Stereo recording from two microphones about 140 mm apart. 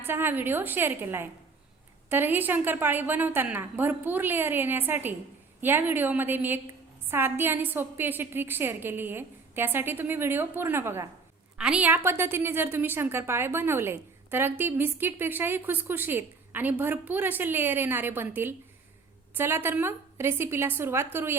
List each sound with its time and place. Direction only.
0.0 s a woman's voice: 15° right (ahead or behind)
11.5 s a woman's voice: 5° right (ahead or behind)